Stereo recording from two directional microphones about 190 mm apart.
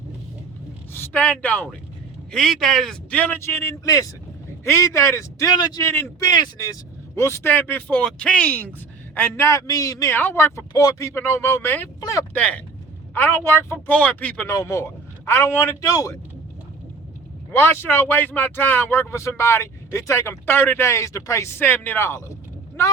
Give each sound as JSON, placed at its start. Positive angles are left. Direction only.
{"t": 0.9, "sound": "a man's voice", "side_deg": 10}
{"t": 17.5, "sound": "a man's voice", "side_deg": 10}